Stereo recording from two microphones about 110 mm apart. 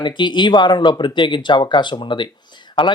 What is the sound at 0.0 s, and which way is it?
Speech, 45° left (ahead or behind).